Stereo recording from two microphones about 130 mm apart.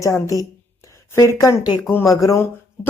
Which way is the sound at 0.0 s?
25° left (ahead or behind).